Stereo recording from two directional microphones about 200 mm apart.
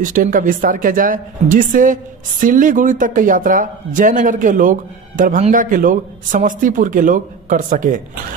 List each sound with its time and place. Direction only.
0.0 s a woman's voice: 40° right (ahead or behind)